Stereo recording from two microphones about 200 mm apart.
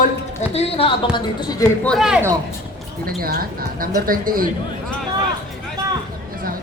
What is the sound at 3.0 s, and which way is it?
A man's voice, 50° right (ahead or behind).